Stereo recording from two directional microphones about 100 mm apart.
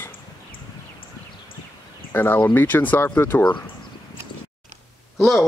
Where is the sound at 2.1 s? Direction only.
20° left (ahead or behind).